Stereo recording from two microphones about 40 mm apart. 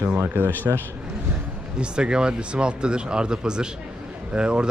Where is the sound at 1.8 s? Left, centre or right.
Right.